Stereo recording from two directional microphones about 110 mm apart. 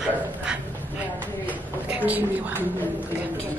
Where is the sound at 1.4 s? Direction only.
15° right (ahead or behind).